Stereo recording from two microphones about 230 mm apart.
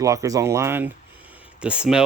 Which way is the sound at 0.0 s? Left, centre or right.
Centre.